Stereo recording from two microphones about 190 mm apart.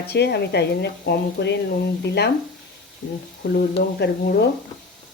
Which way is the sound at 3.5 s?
55° left (ahead or behind).